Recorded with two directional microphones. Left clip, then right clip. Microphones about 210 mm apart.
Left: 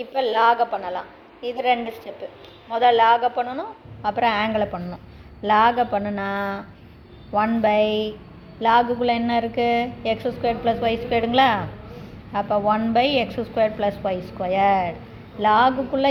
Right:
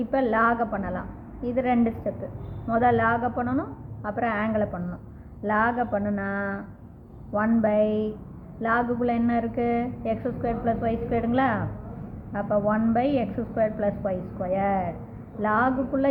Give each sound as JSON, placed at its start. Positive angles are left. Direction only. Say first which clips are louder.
{"t": 0.2, "sound": "a woman's voice", "louder": "left 6 dB", "side_deg": 15}